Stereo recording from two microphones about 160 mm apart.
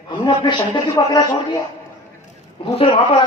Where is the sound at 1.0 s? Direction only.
20° left (ahead or behind).